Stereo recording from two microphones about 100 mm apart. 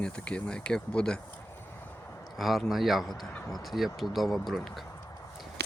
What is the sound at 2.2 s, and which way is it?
Speech, centre (ahead or behind).